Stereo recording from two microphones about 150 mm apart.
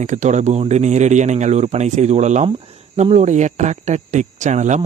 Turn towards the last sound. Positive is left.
turn(degrees=-55)  # may be behind; listen again after turning